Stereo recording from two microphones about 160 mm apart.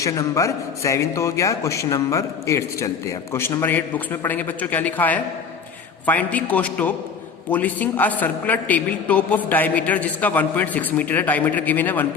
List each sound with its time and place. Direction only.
0.0 s a man's voice: 20° left (ahead or behind)